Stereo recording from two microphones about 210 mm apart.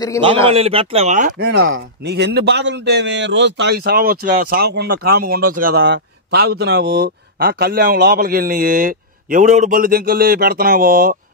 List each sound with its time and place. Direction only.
0.5 s speech: 25° right (ahead or behind)
1.5 s a man's voice: 50° right (ahead or behind)